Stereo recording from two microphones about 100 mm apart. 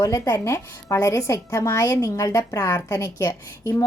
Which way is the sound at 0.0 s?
30° left (ahead or behind).